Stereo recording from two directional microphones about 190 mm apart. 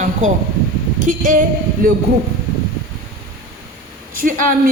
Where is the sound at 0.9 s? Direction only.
45° right (ahead or behind).